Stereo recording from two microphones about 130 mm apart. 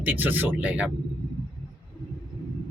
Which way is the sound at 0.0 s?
15° right (ahead or behind).